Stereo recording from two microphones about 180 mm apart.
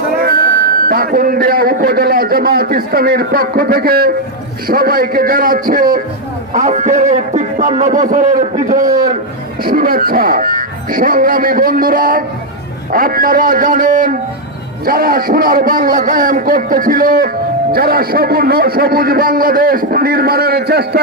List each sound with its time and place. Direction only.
0.9 s a man's voice: 55° right (ahead or behind)
6.5 s a man's voice: 40° right (ahead or behind); by 21.0 s 60° right (ahead or behind)